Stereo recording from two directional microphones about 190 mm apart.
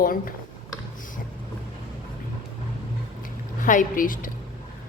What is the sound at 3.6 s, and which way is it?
Speech, 45° left (ahead or behind).